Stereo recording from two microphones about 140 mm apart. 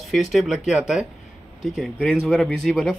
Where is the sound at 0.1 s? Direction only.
Centre (ahead or behind).